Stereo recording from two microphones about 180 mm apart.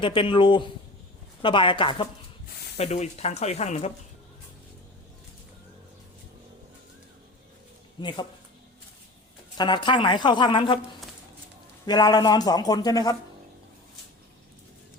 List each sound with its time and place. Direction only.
0.0 s speech: 25° left (ahead or behind)
8.0 s speech: 25° left (ahead or behind)
9.6 s speech: 25° left (ahead or behind)
11.9 s speech: 20° left (ahead or behind)